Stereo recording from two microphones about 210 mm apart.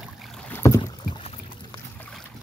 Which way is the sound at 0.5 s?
15° left (ahead or behind).